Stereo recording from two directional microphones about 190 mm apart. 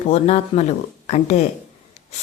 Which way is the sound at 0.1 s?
35° left (ahead or behind).